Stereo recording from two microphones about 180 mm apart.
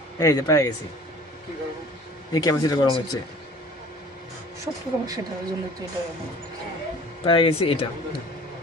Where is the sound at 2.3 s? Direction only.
20° left (ahead or behind).